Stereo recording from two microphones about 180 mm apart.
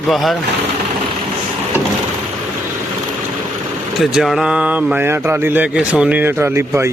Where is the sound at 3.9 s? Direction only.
Centre (ahead or behind).